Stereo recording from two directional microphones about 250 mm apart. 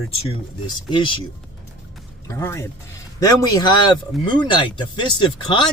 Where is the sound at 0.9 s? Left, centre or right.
Centre.